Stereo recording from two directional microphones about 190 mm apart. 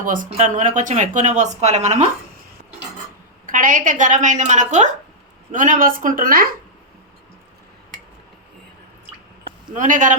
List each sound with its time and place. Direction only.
0.0 s a woman's voice: 45° right (ahead or behind)
3.4 s a woman's voice: 45° right (ahead or behind)
9.7 s a woman's voice: 40° right (ahead or behind)